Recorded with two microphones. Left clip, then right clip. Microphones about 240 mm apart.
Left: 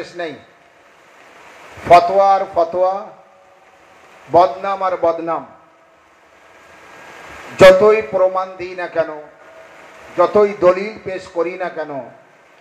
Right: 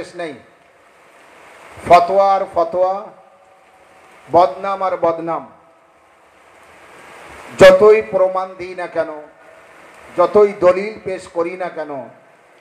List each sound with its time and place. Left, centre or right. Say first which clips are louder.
0.2 s a man's voice: left 1 dB; right
1.9 s a man's voice: left 1 dB; right
4.3 s a man's voice: even; right
7.5 s a man's voice: right 1 dB; right